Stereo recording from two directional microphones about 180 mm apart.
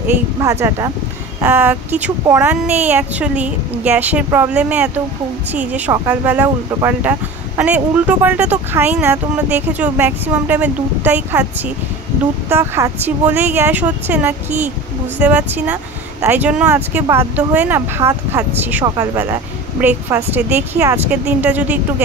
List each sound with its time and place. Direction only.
0.4 s speech: 15° right (ahead or behind)
12.4 s speech: 15° right (ahead or behind)